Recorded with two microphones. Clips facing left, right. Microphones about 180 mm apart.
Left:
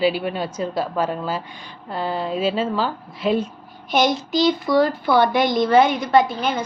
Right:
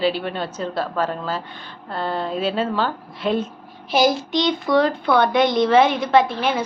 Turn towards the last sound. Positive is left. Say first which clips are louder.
# even
turn(degrees=0)  # may be behind; listen again after turning